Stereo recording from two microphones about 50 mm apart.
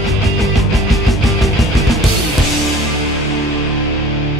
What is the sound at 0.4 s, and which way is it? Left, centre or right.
Music, centre.